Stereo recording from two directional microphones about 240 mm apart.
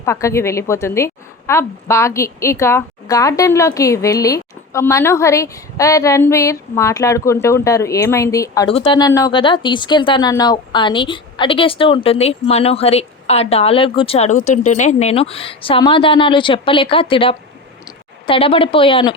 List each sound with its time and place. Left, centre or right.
0.0 s a woman's voice: centre